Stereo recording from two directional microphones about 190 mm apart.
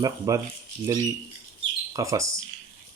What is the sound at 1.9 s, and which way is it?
Speech, 15° right (ahead or behind).